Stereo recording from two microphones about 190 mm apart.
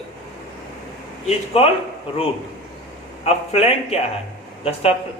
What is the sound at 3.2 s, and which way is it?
Speech, 35° left (ahead or behind).